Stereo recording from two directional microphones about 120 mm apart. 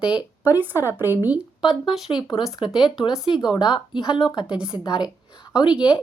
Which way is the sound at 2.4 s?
5° right (ahead or behind).